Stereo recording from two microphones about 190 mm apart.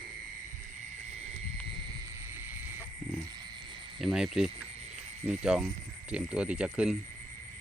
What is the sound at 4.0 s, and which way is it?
Cricket, centre (ahead or behind).